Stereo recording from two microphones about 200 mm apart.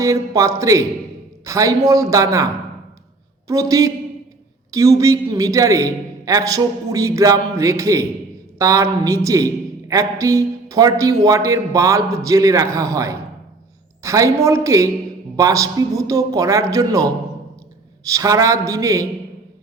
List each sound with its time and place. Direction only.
0.0 s a man's voice: 15° right (ahead or behind)